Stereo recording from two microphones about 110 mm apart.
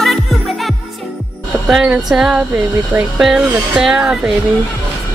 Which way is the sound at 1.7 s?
5° right (ahead or behind).